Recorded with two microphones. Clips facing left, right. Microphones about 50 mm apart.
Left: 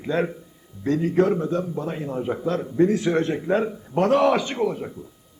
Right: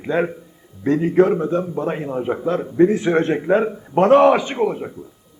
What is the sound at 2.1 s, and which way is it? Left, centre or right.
A man's voice, right.